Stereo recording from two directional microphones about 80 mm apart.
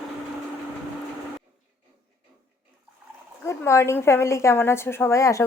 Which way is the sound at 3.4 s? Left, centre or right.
Left.